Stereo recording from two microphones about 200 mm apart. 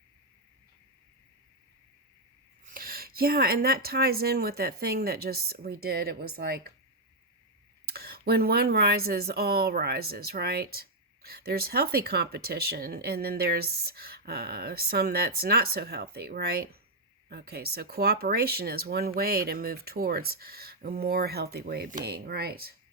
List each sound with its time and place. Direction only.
2.6 s speech: 45° right (ahead or behind)
7.9 s speech: 50° right (ahead or behind)